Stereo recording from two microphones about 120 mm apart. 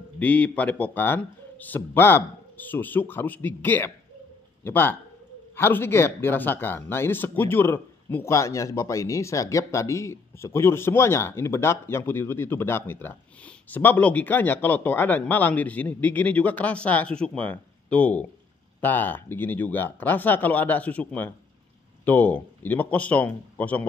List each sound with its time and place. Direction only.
0.2 s speech: 10° left (ahead or behind)